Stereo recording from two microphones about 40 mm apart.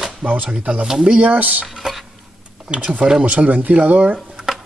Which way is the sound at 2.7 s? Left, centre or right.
Right.